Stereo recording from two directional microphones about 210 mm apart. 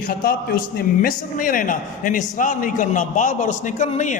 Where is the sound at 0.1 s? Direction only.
45° left (ahead or behind).